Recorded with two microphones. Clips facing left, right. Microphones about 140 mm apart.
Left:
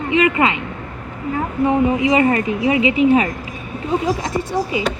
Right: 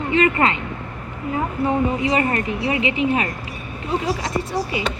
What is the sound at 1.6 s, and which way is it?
A woman's voice, 20° left (ahead or behind).